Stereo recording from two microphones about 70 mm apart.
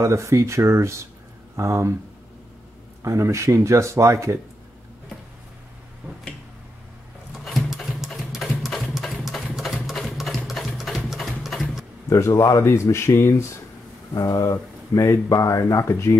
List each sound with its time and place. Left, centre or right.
0.0 s speech: right
3.0 s speech: right
7.3 s sewing machine: centre
8.3 s a sound: centre
11.1 s sewing machine: centre
12.1 s speech: left
14.1 s speech: left